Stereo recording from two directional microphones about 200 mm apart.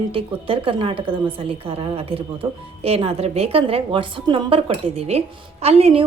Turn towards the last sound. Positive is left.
turn(degrees=-30)  # may be behind; listen again after turning